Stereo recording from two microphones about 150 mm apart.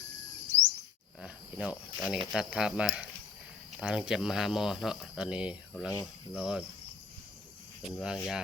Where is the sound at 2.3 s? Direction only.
5° right (ahead or behind).